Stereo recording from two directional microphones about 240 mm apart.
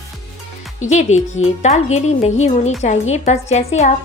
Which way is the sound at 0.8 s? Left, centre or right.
Left.